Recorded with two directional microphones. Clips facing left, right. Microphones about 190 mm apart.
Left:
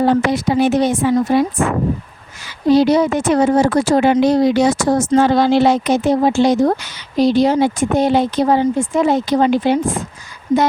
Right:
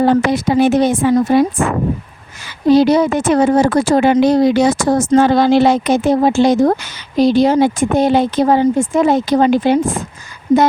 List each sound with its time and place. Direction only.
0.0 s speech: 55° right (ahead or behind)
2.7 s speech: 55° right (ahead or behind)